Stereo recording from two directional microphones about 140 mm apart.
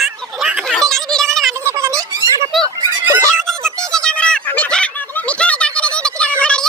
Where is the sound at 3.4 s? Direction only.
5° left (ahead or behind).